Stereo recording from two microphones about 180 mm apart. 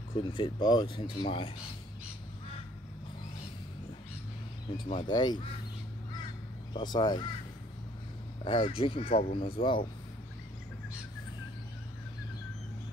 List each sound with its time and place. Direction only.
0.1 s speech: 30° left (ahead or behind)
4.8 s speech: 30° left (ahead or behind)
6.7 s speech: 25° left (ahead or behind)
8.5 s speech: 30° left (ahead or behind)